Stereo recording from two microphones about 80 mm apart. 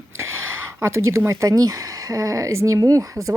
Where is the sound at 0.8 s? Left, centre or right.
Right.